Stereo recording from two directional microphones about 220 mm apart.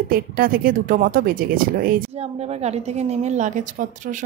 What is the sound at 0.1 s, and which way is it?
Speech, 40° right (ahead or behind).